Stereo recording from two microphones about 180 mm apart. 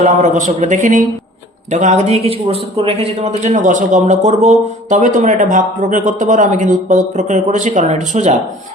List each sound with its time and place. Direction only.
0.0 s a man's voice: 40° right (ahead or behind)